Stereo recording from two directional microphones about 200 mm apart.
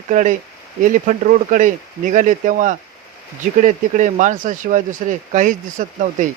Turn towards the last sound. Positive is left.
turn(degrees=-40)  # may be behind; listen again after turning